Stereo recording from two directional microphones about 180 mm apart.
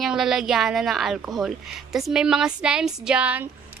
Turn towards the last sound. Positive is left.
turn(degrees=-5)  # may be behind; listen again after turning